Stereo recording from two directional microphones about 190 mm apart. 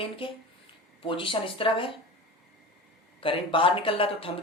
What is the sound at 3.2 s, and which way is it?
Speech, 25° left (ahead or behind).